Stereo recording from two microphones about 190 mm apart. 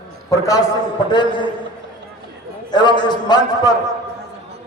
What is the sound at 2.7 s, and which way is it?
A man's voice, 20° left (ahead or behind).